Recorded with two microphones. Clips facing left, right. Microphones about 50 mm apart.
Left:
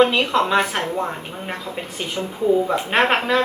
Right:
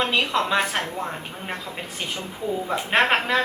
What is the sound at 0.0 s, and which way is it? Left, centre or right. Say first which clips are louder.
Speech: left 6 dB; centre.